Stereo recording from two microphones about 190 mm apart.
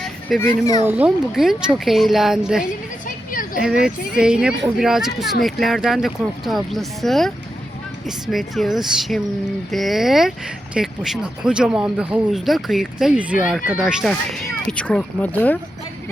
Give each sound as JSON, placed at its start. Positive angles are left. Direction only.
{"t": 0.3, "sound": "speech", "side_deg": 15}
{"t": 0.9, "sound": "speech", "side_deg": -5}